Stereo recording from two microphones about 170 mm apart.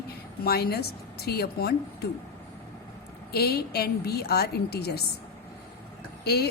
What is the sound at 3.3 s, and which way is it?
A woman's voice, 65° left (ahead or behind).